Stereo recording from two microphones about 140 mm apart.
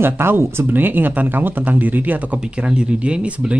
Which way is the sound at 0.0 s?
15° right (ahead or behind).